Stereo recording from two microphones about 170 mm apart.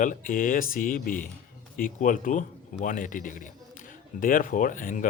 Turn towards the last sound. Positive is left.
turn(degrees=50)  # may be behind; listen again after turning